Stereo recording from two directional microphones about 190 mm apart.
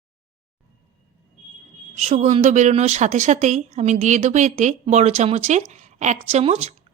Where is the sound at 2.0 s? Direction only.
35° right (ahead or behind).